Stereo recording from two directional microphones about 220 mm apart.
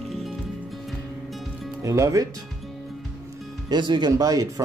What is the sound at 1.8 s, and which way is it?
Music, 15° right (ahead or behind).